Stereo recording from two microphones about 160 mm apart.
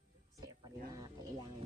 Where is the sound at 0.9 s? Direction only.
20° right (ahead or behind).